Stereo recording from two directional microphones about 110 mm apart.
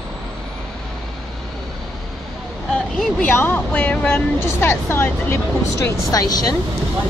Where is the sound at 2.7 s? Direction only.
5° left (ahead or behind).